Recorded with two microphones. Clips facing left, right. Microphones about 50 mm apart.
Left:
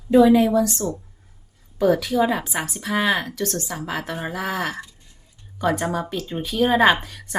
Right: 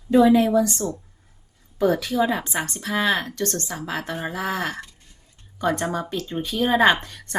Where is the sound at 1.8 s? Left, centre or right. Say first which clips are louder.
Left 2 dB; centre.